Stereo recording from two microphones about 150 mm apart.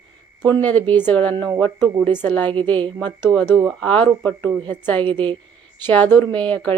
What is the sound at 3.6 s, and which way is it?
A woman's voice, 5° left (ahead or behind).